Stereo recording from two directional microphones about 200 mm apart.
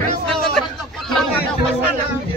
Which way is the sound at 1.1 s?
Centre (ahead or behind).